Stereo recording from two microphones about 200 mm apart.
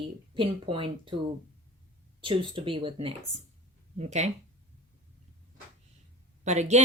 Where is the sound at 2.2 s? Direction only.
25° right (ahead or behind).